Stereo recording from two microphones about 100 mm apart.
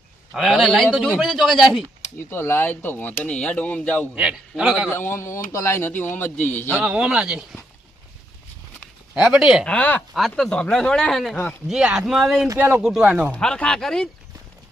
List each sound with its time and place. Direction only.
0.3 s speech: 5° right (ahead or behind)
2.3 s speech: 25° left (ahead or behind)
4.1 s a man's voice: 10° right (ahead or behind)
4.9 s speech: 25° left (ahead or behind)
6.7 s a man's voice: 10° right (ahead or behind)
9.1 s speech: 5° right (ahead or behind)
9.6 s speech: 15° left (ahead or behind)
10.2 s a man's voice: centre (ahead or behind)
13.3 s speech: 10° left (ahead or behind)